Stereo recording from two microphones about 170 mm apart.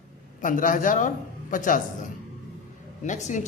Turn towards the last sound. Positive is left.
turn(degrees=45)  # may be behind; listen again after turning